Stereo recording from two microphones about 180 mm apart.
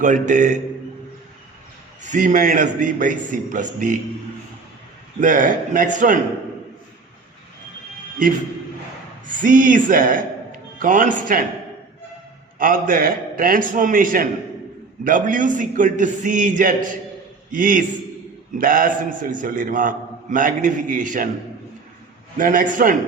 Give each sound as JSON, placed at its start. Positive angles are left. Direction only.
{"t": 0.0, "sound": "a man's voice", "side_deg": -45}
{"t": 2.0, "sound": "a man's voice", "side_deg": -45}
{"t": 5.2, "sound": "a man's voice", "side_deg": -45}
{"t": 9.2, "sound": "a man's voice", "side_deg": -45}
{"t": 12.5, "sound": "a man's voice", "side_deg": -50}
{"t": 22.4, "sound": "a man's voice", "side_deg": -50}